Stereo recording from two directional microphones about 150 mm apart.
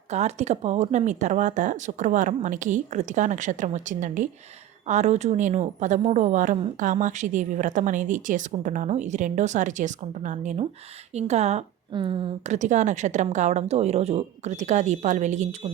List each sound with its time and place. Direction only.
0.1 s speech: 50° right (ahead or behind)
11.9 s speech: 35° right (ahead or behind)
12.4 s speech: 50° right (ahead or behind)